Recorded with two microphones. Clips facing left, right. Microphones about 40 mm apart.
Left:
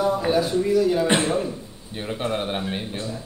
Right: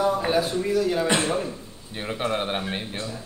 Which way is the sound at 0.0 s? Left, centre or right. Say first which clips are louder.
Left 1 dB; centre.